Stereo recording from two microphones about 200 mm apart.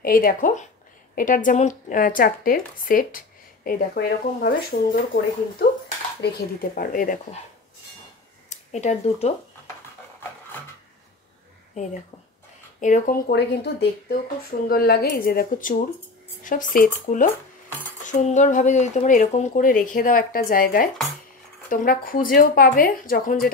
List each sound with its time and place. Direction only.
0.0 s speech: 45° left (ahead or behind)
8.5 s speech: 35° left (ahead or behind)
12.8 s speech: 40° left (ahead or behind)
13.3 s speech: 55° left (ahead or behind)